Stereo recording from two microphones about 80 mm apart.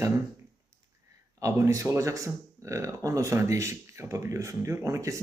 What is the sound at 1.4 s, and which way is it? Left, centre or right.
Speech, right.